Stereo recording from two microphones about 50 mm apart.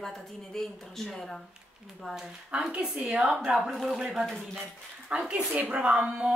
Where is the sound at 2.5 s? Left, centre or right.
Right.